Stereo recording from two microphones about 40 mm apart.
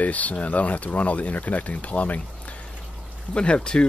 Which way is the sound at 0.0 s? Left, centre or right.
Left.